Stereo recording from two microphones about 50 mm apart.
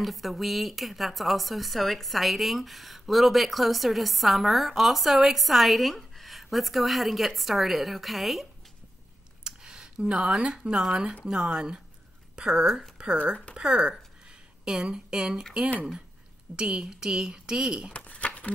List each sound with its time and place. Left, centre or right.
0.0 s speech: centre
9.4 s speech: centre
16.5 s speech: centre
17.9 s a sound: left